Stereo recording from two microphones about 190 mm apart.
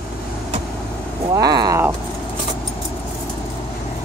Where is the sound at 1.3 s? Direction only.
20° right (ahead or behind).